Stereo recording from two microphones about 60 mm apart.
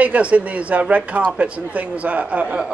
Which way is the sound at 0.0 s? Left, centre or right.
Right.